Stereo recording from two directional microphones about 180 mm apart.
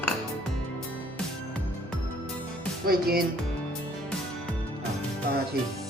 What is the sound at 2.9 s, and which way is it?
Speech, 55° right (ahead or behind).